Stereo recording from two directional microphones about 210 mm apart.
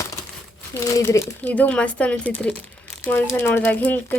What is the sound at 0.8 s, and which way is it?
Speech, 15° left (ahead or behind).